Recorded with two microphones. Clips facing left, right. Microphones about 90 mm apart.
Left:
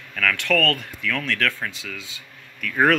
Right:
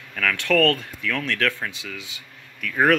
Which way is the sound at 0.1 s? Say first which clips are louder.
Right 1 dB; 20° right (ahead or behind).